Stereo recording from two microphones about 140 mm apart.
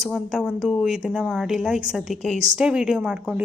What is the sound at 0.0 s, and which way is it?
A woman's voice, centre (ahead or behind).